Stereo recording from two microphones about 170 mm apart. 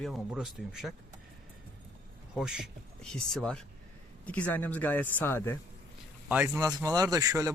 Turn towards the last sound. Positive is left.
turn(degrees=-20)  # may be behind; listen again after turning